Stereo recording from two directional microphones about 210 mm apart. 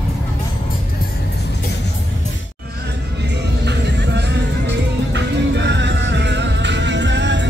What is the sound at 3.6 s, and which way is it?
Music, 55° right (ahead or behind).